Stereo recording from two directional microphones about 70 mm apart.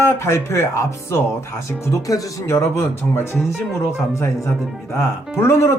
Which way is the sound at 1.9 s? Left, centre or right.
Left.